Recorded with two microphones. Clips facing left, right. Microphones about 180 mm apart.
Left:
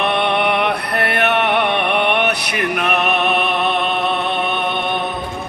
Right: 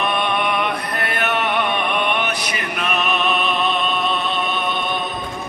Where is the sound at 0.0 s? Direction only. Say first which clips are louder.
Left 4 dB; 65° left (ahead or behind).